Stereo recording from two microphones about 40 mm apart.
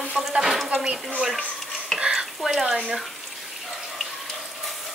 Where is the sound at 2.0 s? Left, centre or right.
Centre.